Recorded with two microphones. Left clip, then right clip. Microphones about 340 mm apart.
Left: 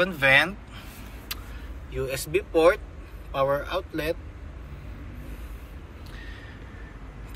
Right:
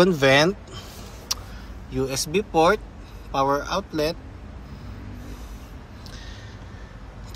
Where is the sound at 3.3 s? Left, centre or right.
Centre.